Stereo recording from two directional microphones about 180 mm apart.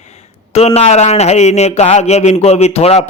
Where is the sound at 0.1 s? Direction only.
35° left (ahead or behind).